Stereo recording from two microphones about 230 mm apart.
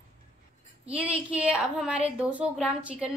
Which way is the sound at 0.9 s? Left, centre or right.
Centre.